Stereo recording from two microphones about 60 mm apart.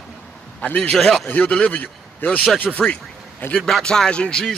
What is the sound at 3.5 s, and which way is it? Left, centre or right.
Speech, centre.